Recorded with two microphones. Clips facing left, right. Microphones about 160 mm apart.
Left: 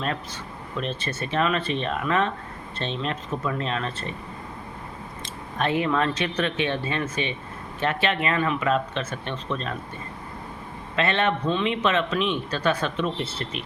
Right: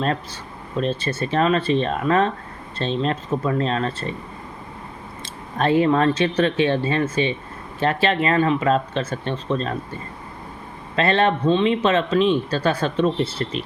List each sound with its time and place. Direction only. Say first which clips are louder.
0.8 s a man's voice: right 7 dB; 35° right (ahead or behind)
5.2 s a man's voice: right 5 dB; 35° right (ahead or behind)
10.9 s a man's voice: right 5 dB; 35° right (ahead or behind)